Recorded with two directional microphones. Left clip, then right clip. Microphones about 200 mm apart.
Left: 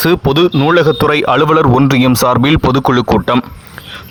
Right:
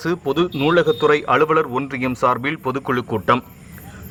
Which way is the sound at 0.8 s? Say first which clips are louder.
Left 5 dB; 35° left (ahead or behind).